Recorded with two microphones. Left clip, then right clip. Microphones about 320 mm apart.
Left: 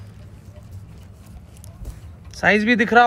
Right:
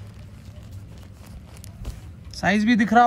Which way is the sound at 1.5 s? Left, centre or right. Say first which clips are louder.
Right 1 dB; centre.